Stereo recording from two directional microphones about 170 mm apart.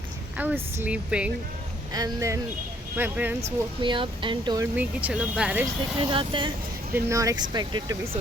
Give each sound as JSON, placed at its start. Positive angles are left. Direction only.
{"t": 0.3, "sound": "speech", "side_deg": -10}
{"t": 1.9, "sound": "speech", "side_deg": -20}
{"t": 3.4, "sound": "speech", "side_deg": -30}
{"t": 4.6, "sound": "speech", "side_deg": -10}
{"t": 6.1, "sound": "speech", "side_deg": -30}
{"t": 6.9, "sound": "speech", "side_deg": -20}